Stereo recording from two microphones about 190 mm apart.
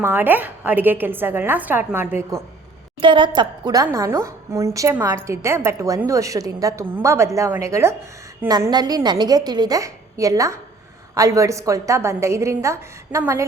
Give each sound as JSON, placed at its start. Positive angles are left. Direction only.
{"t": 0.0, "sound": "a woman's voice", "side_deg": -10}
{"t": 3.0, "sound": "a woman's voice", "side_deg": -25}